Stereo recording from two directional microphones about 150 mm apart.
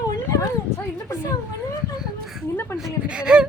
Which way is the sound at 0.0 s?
25° left (ahead or behind).